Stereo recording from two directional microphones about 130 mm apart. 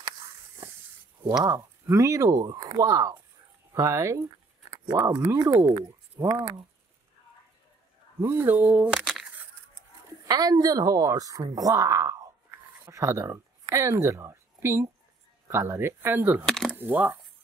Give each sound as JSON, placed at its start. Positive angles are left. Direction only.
{"t": 1.4, "sound": "speech", "side_deg": -25}
{"t": 8.2, "sound": "speech", "side_deg": -20}
{"t": 9.0, "sound": "crushing", "side_deg": 5}
{"t": 10.2, "sound": "speech", "side_deg": -30}
{"t": 16.4, "sound": "speech", "side_deg": 5}
{"t": 16.7, "sound": "speech", "side_deg": -15}